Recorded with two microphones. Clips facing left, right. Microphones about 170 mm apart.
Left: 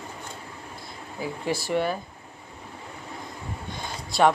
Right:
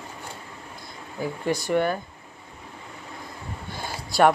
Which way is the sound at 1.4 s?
5° left (ahead or behind).